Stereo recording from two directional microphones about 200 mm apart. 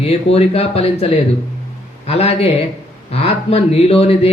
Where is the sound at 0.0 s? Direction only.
30° left (ahead or behind).